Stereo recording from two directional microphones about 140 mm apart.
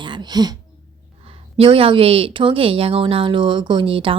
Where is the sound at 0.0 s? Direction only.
30° right (ahead or behind).